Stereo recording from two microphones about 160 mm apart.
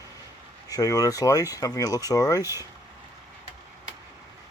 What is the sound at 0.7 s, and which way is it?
Speech, 20° left (ahead or behind).